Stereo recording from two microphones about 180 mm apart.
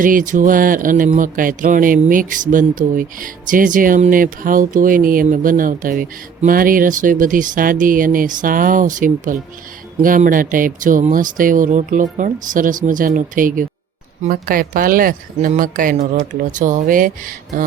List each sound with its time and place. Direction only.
0.0 s speech: 50° right (ahead or behind)